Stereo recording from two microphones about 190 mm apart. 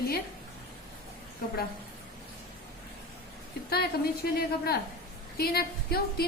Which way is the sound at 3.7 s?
55° left (ahead or behind).